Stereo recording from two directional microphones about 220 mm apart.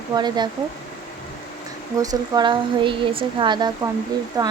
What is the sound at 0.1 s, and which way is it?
Speech, 20° right (ahead or behind).